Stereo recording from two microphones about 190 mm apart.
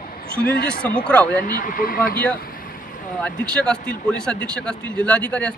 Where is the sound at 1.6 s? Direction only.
50° left (ahead or behind).